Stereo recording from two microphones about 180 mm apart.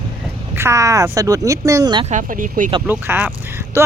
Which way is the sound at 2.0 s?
45° right (ahead or behind).